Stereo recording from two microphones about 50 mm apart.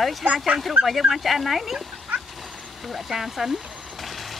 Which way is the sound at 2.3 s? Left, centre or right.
Centre.